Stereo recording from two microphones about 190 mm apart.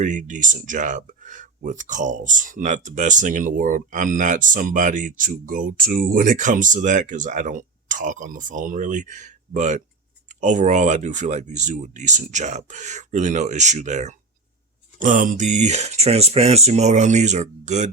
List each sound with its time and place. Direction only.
0.0 s speech: 40° right (ahead or behind)